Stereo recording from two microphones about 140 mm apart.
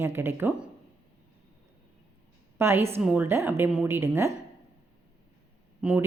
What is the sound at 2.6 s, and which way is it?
A woman's voice, 15° right (ahead or behind).